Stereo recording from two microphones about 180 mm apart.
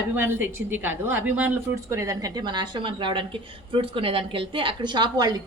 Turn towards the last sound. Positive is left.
turn(degrees=-25)  # may be behind; listen again after turning